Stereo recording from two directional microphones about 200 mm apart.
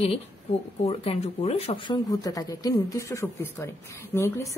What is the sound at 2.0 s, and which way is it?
Speech, 20° left (ahead or behind).